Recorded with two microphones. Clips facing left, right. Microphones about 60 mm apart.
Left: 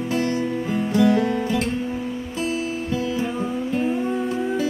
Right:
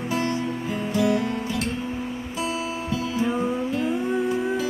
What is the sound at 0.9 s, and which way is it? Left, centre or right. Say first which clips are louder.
Music: left 4 dB; left.